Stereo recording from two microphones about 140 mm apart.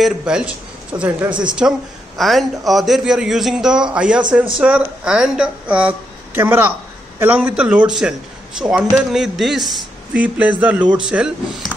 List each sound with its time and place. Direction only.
0.0 s a man's voice: 5° right (ahead or behind)